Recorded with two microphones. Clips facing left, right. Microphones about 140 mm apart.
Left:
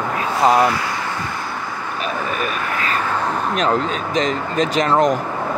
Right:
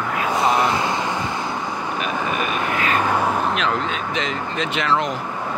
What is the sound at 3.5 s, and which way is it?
Speech, 40° left (ahead or behind).